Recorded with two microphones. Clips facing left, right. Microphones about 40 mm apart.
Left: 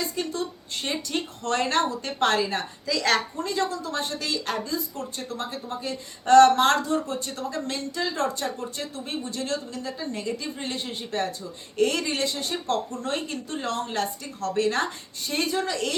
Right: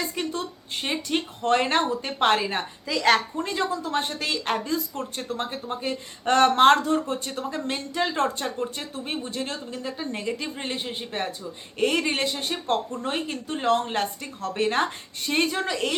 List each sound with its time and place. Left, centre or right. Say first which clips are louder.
1.0 s speech: right 4 dB; right
10.8 s speech: left 1 dB; right